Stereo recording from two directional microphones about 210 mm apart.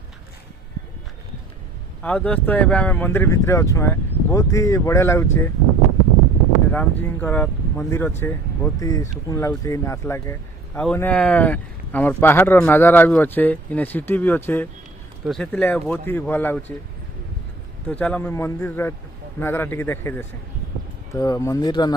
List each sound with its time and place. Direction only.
2.0 s speech: 5° left (ahead or behind)
6.7 s speech: 10° left (ahead or behind)
17.8 s speech: 5° left (ahead or behind)